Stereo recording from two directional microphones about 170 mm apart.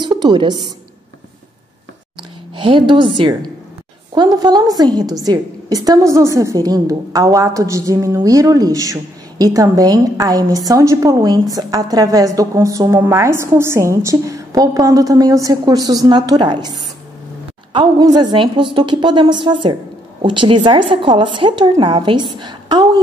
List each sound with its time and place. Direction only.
0.0 s a woman's voice: 25° right (ahead or behind)
2.5 s a woman's voice: 30° right (ahead or behind)
17.7 s a woman's voice: 25° right (ahead or behind)